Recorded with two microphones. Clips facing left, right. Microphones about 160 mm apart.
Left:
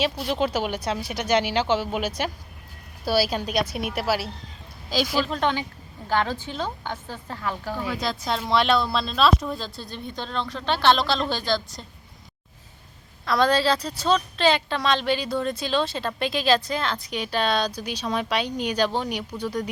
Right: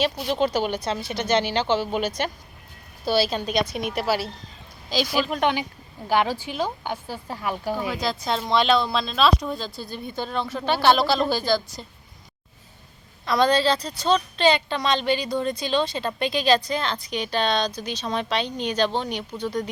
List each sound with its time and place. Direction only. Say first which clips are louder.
0.0 s a woman's voice: right 1 dB; centre (ahead or behind)
5.3 s a woman's voice: right 2 dB; 15° right (ahead or behind)
7.9 s a woman's voice: right 1 dB; centre (ahead or behind)
13.2 s a woman's voice: right 1 dB; centre (ahead or behind)